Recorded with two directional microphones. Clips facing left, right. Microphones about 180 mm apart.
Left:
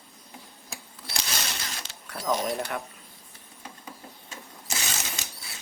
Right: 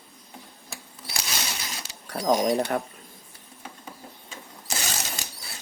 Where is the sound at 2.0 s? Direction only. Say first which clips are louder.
Right 6 dB; 40° right (ahead or behind).